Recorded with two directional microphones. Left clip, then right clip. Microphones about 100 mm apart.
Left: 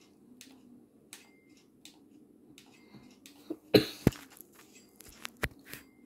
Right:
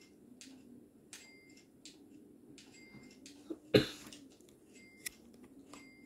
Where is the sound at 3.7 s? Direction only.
45° left (ahead or behind).